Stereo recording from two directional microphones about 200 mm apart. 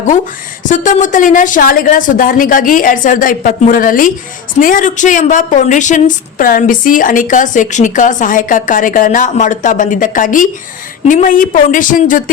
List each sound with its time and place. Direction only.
0.7 s a woman's voice: 40° left (ahead or behind)